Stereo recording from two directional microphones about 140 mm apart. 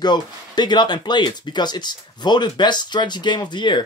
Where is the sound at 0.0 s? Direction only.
30° left (ahead or behind).